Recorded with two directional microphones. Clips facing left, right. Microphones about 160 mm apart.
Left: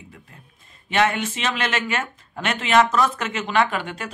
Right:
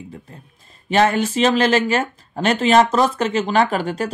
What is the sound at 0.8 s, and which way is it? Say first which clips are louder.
Speech: right 5 dB; 35° right (ahead or behind).